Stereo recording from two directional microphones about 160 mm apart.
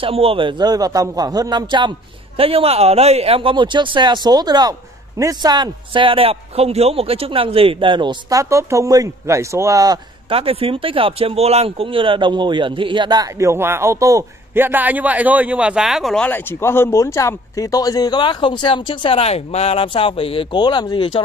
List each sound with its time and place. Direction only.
0.0 s a man's voice: 35° right (ahead or behind); by 9.9 s 20° right (ahead or behind)
10.3 s speech: 35° right (ahead or behind); by 21.2 s 30° left (ahead or behind)